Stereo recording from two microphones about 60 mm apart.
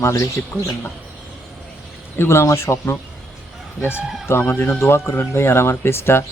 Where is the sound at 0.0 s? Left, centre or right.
Left.